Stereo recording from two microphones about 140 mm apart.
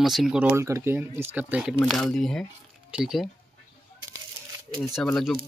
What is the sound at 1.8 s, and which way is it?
Speech, 5° left (ahead or behind).